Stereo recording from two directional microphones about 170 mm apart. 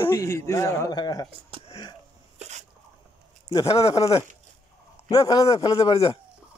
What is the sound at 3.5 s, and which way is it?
Speech, 35° left (ahead or behind).